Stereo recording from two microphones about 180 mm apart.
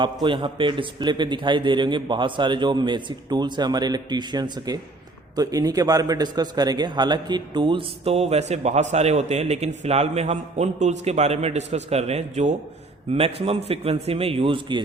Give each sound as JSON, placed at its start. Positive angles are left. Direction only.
{"t": 0.0, "sound": "a man's voice", "side_deg": -25}